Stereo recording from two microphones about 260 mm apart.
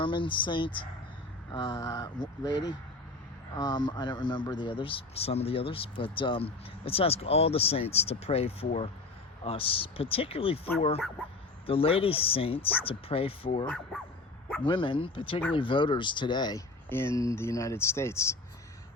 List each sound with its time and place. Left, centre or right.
0.0 s a man's voice: centre
13.7 s speech: centre
14.6 s a man's voice: centre